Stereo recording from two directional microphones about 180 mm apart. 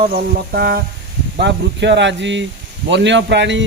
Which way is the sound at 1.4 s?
75° right (ahead or behind).